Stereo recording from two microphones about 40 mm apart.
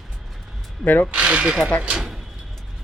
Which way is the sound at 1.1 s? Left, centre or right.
Right.